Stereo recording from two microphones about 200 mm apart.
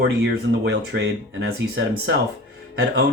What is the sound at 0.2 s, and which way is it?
Speech, 60° right (ahead or behind).